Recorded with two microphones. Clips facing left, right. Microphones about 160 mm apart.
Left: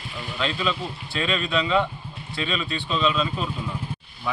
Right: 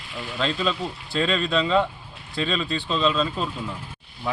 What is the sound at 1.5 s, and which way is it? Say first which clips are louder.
A man's voice: right 1 dB; 35° right (ahead or behind).